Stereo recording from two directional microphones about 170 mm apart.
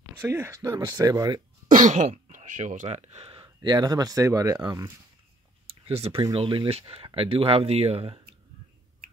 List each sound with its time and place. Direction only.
0.2 s speech: 15° right (ahead or behind)
1.7 s speech: 50° right (ahead or behind); by 4.9 s 20° right (ahead or behind)
5.9 s speech: 35° right (ahead or behind)